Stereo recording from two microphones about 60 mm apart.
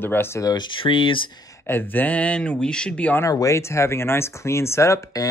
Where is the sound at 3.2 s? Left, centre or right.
Left.